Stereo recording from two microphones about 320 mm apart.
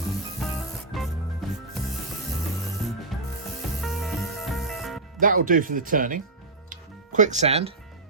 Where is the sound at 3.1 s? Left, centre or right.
Centre.